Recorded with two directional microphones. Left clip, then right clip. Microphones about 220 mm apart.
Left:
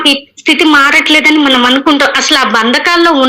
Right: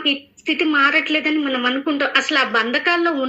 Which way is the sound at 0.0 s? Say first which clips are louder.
Left 11 dB; 40° left (ahead or behind).